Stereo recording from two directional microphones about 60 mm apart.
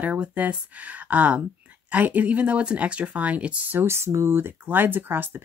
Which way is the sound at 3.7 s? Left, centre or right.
Right.